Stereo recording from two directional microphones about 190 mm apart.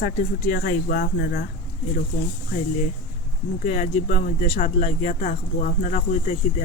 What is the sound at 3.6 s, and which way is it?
Speech, 40° left (ahead or behind).